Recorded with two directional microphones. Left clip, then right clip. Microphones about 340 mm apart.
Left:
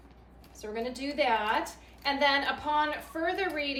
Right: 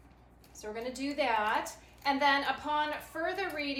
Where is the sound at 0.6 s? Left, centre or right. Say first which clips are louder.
Left 3 dB; centre.